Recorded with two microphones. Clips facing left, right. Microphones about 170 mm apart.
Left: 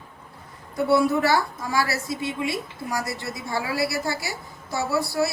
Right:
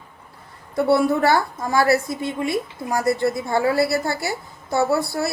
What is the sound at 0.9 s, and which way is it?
A woman's voice, 55° right (ahead or behind).